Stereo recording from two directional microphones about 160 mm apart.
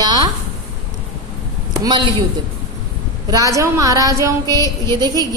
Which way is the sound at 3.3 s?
20° right (ahead or behind).